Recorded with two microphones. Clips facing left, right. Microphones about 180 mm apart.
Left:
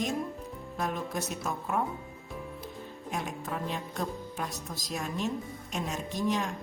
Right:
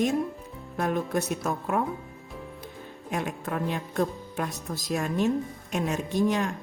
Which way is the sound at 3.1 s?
60° right (ahead or behind).